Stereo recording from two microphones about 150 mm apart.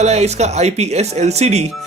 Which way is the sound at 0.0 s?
45° right (ahead or behind).